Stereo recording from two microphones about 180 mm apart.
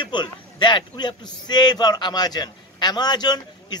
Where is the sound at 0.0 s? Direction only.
25° left (ahead or behind).